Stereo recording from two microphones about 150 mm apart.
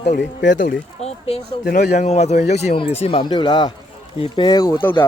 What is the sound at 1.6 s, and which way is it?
Speech, 90° left.